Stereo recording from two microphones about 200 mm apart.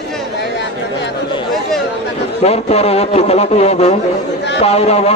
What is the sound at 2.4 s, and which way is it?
A man's voice, 30° left (ahead or behind).